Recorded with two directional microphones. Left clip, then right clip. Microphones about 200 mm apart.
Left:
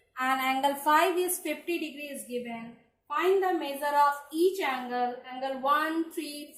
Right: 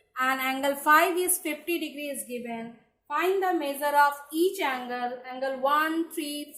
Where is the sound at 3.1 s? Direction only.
35° right (ahead or behind).